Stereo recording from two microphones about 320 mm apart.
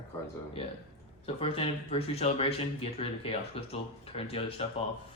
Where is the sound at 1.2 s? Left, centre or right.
Centre.